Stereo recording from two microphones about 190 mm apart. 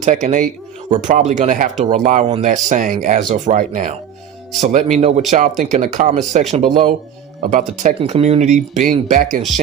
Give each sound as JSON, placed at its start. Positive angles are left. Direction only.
{"t": 0.0, "sound": "speech", "side_deg": -40}
{"t": 7.5, "sound": "speech", "side_deg": -40}